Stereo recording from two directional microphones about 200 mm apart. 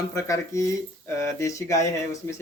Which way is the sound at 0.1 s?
15° left (ahead or behind).